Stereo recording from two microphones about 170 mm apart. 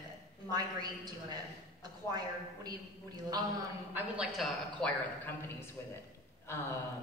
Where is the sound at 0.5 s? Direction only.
25° right (ahead or behind).